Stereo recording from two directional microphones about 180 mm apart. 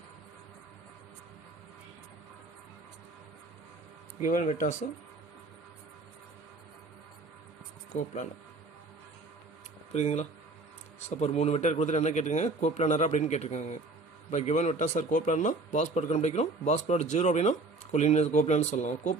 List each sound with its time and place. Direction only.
4.2 s speech: 45° left (ahead or behind)
7.9 s speech: 45° left (ahead or behind)
9.9 s a man's voice: 40° left (ahead or behind)